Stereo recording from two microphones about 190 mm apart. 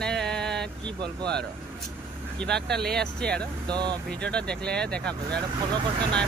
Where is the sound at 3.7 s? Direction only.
25° right (ahead or behind).